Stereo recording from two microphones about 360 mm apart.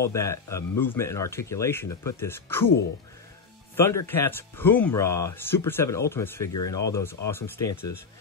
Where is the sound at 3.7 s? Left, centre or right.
Centre.